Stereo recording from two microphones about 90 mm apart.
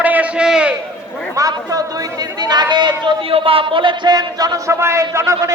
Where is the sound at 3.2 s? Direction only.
90° right; by 4.7 s 45° right (ahead or behind).